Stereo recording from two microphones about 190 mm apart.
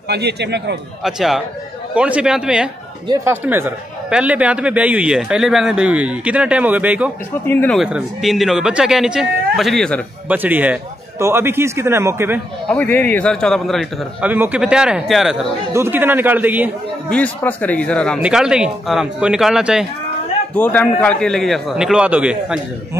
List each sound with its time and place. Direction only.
0.1 s a man's voice: 60° right (ahead or behind)
1.0 s a man's voice: centre (ahead or behind)
7.4 s speech: 10° left (ahead or behind)
7.8 s a man's voice: centre (ahead or behind)
10.2 s a man's voice: 10° right (ahead or behind)
12.6 s a man's voice: 10° left (ahead or behind); by 16.7 s 10° right (ahead or behind)
17.1 s a man's voice: 10° left (ahead or behind)
20.5 s a man's voice: 10° left (ahead or behind)